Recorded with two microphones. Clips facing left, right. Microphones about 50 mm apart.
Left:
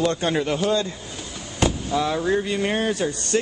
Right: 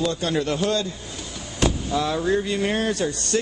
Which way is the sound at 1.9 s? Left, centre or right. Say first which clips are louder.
Left 1 dB; centre.